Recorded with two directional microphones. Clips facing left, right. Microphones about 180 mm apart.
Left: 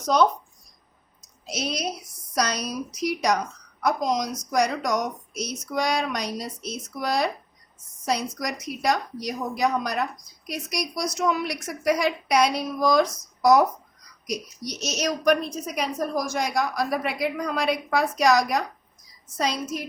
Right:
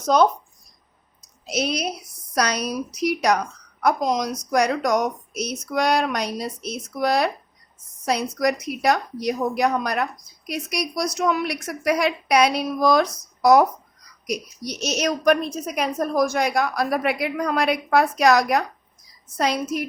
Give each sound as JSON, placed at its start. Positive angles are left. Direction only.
{"t": 0.0, "sound": "speech", "side_deg": -50}
{"t": 1.5, "sound": "a woman's voice", "side_deg": -65}
{"t": 14.8, "sound": "a woman's voice", "side_deg": -60}